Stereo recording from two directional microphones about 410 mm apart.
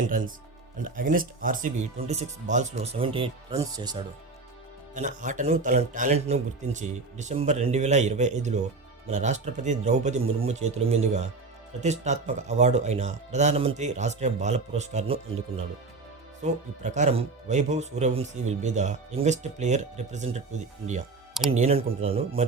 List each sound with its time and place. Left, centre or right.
0.1 s speech: centre
16.4 s speech: centre
21.6 s speech: centre